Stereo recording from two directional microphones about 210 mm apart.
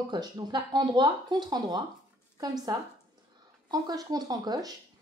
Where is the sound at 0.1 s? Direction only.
20° right (ahead or behind).